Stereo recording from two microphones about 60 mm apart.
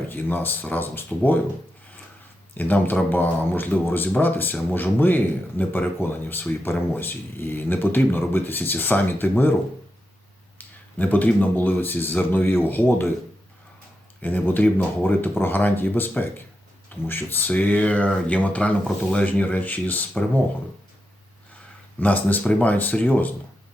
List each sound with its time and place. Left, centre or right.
0.1 s speech: left
2.6 s speech: left
10.6 s a sound: left
11.3 s speech: left
14.2 s speech: left
22.0 s speech: left